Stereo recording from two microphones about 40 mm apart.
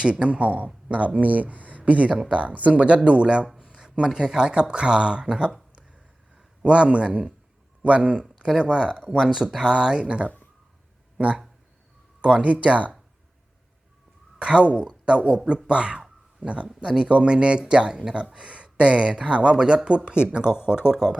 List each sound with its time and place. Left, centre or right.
0.0 s speech: right
5.7 s a sound: right
6.7 s a man's voice: right
9.2 s speech: centre
9.8 s speech: right
10.2 s a sound: left
12.2 s speech: right
14.3 s speech: right
16.8 s speech: right